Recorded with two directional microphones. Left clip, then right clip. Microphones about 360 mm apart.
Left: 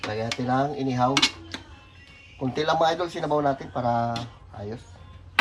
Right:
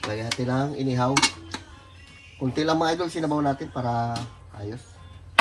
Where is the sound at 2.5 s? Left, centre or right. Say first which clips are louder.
Left 1 dB; centre.